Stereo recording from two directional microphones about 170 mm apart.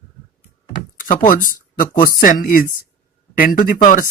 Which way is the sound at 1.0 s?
55° left (ahead or behind).